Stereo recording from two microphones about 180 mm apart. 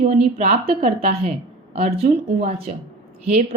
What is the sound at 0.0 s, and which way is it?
A woman's voice, 35° right (ahead or behind).